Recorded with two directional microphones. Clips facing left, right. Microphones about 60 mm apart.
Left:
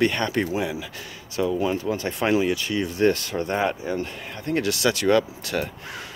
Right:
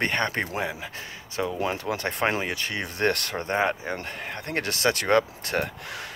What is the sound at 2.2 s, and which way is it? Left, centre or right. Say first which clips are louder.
Speech: left 6 dB; right.